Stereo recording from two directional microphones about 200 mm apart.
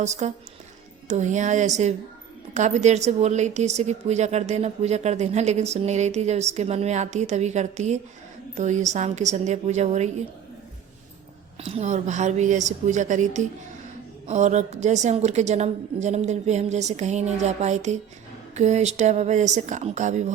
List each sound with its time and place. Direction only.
0.0 s a woman's voice: 35° right (ahead or behind)
11.6 s a woman's voice: 35° right (ahead or behind)